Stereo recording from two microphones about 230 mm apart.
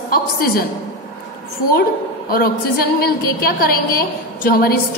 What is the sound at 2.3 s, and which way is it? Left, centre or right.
A woman's voice, left.